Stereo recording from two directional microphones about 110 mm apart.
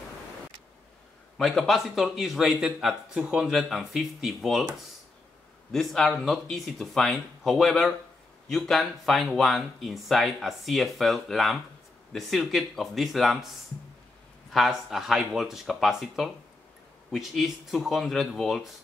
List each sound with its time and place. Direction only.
1.4 s a man's voice: centre (ahead or behind)
5.7 s a man's voice: centre (ahead or behind)
14.5 s a man's voice: centre (ahead or behind)